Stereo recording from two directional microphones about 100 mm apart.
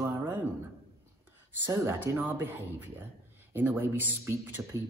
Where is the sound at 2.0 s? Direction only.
20° right (ahead or behind).